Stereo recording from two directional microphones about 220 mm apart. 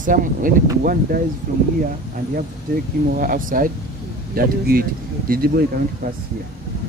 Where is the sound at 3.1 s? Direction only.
40° right (ahead or behind).